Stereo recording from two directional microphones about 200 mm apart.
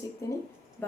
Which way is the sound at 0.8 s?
10° left (ahead or behind).